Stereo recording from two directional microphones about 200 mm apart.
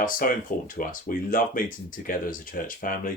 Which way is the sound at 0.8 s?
45° left (ahead or behind).